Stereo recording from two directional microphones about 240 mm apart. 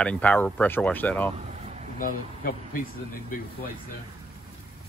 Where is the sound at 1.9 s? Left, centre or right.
Left.